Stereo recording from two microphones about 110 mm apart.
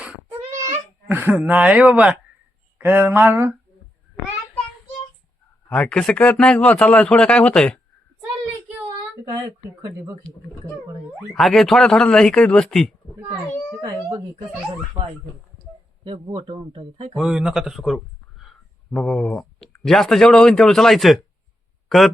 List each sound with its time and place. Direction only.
1.0 s speech: 15° right (ahead or behind)
5.6 s a man's voice: 10° left (ahead or behind)
10.3 s a man's voice: 5° left (ahead or behind)
16.0 s speech: 55° right (ahead or behind)
17.2 s speech: 5° right (ahead or behind)